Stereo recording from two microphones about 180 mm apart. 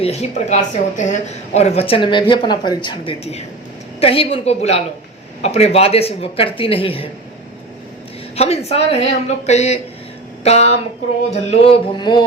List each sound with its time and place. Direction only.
0.0 s a woman's voice: 35° left (ahead or behind)
8.4 s a woman's voice: 35° left (ahead or behind)
11.3 s a sound: 30° left (ahead or behind)